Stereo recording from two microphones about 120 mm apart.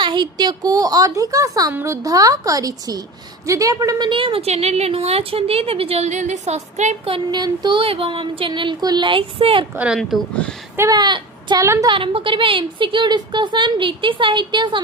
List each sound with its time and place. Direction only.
0.0 s a woman's voice: 40° right (ahead or behind); by 7.1 s 70° right (ahead or behind)
7.3 s a woman's voice: 35° right (ahead or behind)
9.7 s speech: 10° right (ahead or behind)
10.0 s speech: 5° left (ahead or behind)
10.8 s speech: 30° right (ahead or behind)
11.6 s a woman's voice: 25° right (ahead or behind)
11.9 s a woman's voice: 45° right (ahead or behind)